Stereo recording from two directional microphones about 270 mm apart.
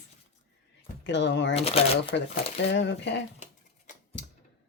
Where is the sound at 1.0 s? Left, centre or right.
Left.